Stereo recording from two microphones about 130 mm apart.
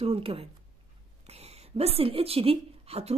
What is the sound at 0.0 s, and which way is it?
Speech, 45° right (ahead or behind).